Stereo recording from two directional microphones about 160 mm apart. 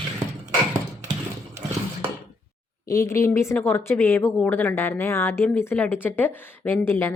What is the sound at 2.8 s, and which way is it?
A woman's voice, 20° left (ahead or behind).